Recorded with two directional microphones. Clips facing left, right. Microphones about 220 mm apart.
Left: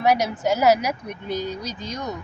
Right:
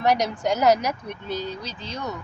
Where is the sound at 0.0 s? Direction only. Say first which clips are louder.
Left 1 dB; 10° left (ahead or behind).